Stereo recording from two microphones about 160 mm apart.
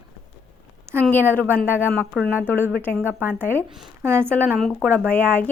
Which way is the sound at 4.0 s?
15° right (ahead or behind).